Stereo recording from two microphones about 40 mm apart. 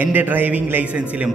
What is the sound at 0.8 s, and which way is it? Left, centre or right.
Speech, right.